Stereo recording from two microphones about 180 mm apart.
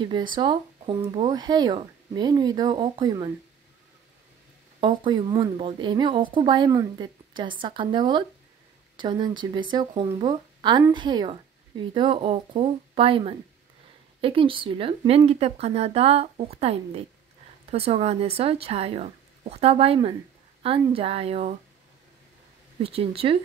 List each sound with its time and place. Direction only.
0.0 s a woman's voice: 25° right (ahead or behind)
4.7 s a woman's voice: 25° right (ahead or behind)
22.8 s a woman's voice: 30° right (ahead or behind)